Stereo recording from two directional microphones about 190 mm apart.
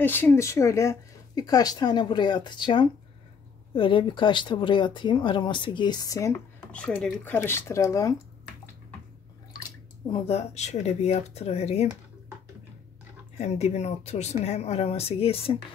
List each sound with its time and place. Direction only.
0.0 s speech: 10° left (ahead or behind)
10.0 s speech: 30° left (ahead or behind)
13.4 s speech: 35° left (ahead or behind)